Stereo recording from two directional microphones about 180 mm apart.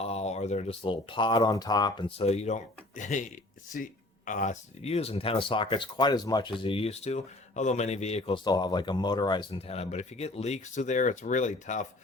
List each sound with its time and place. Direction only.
0.0 s speech: 35° left (ahead or behind)
8.4 s speech: 25° left (ahead or behind); by 11.9 s 45° left (ahead or behind)